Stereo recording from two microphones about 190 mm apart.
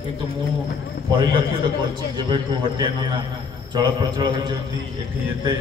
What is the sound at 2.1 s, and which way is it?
A man's voice, 25° right (ahead or behind).